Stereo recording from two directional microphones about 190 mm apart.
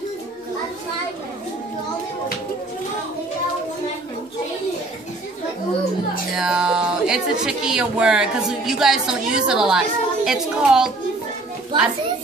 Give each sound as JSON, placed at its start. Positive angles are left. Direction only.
{"t": 6.3, "sound": "a woman's voice", "side_deg": -5}
{"t": 11.7, "sound": "a child's voice", "side_deg": -25}